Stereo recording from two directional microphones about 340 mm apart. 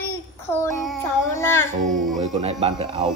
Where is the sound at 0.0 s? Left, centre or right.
Centre.